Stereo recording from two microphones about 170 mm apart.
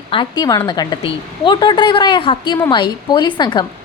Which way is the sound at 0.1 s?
25° left (ahead or behind).